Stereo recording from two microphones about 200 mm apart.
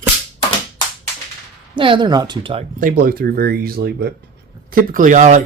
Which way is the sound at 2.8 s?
45° right (ahead or behind).